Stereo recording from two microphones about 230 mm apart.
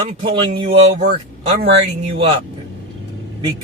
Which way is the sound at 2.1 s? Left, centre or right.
Right.